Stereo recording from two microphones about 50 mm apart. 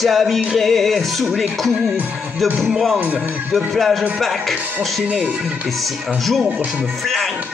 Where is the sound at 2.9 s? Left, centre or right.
Right.